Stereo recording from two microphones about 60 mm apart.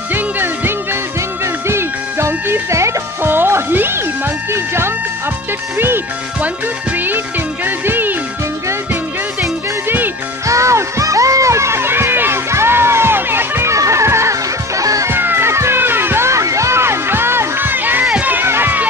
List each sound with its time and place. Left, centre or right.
0.1 s music: right
2.7 s music: right
3.3 s music: right
4.5 s speech: right
7.6 s music: right
10.4 s music: right
13.7 s music: right
14.8 s music: right
15.0 s music: right